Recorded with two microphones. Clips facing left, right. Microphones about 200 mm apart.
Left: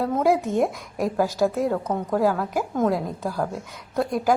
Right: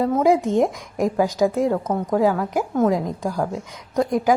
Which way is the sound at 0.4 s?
15° right (ahead or behind).